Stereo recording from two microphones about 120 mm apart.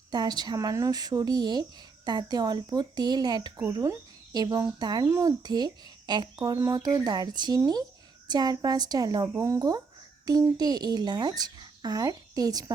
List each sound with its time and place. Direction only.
0.1 s speech: 35° right (ahead or behind)
5.0 s speech: 20° right (ahead or behind)
5.4 s speech: 35° right (ahead or behind)